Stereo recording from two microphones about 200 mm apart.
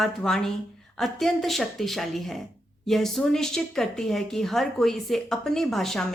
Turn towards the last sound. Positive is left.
turn(degrees=0)  # may be behind; listen again after turning